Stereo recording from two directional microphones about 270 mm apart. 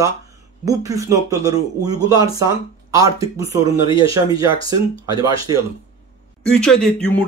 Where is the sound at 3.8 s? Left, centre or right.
Centre.